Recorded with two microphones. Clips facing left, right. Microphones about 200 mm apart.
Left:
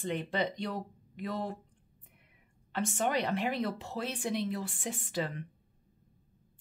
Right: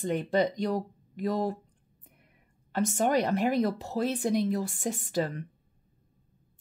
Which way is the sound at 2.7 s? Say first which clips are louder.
Right 6 dB; 40° right (ahead or behind).